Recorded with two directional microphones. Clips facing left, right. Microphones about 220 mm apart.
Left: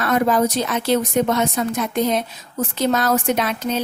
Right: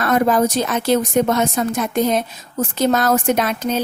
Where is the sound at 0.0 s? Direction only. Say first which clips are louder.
Right 2 dB; 45° right (ahead or behind).